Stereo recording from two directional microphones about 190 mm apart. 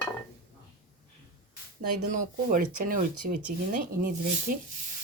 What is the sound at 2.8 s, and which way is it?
Speech, 45° right (ahead or behind).